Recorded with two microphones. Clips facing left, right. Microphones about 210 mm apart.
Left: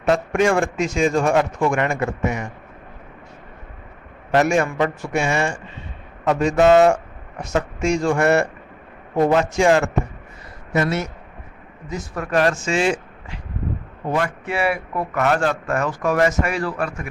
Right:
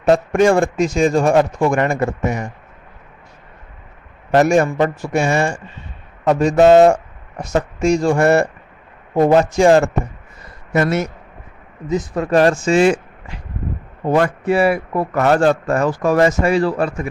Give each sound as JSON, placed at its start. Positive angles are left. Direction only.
{"t": 0.0, "sound": "a man's voice", "side_deg": -35}
{"t": 4.3, "sound": "a man's voice", "side_deg": -35}
{"t": 6.6, "sound": "a man's voice", "side_deg": -35}
{"t": 10.8, "sound": "speech", "side_deg": -50}
{"t": 11.9, "sound": "a man's voice", "side_deg": -20}
{"t": 14.1, "sound": "a man's voice", "side_deg": -40}